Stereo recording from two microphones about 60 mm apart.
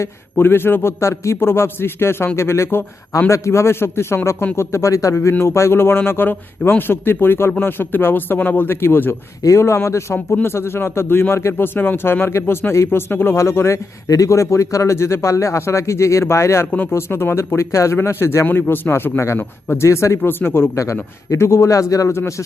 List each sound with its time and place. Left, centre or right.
0.0 s a man's voice: left
3.2 s a man's voice: left
5.3 s a man's voice: left
9.6 s a man's voice: left
13.3 s a man's voice: left
14.1 s speech: left
16.9 s a man's voice: left
17.5 s a man's voice: left
18.0 s a man's voice: left
19.4 s a man's voice: left
19.8 s a man's voice: left
20.2 s a man's voice: left